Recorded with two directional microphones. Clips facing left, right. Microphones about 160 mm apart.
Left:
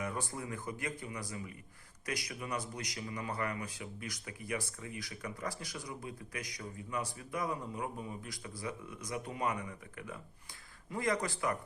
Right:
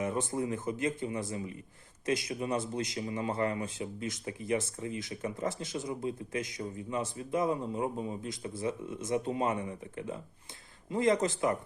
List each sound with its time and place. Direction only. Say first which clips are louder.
0.0 s speech: right 7 dB; 20° right (ahead or behind)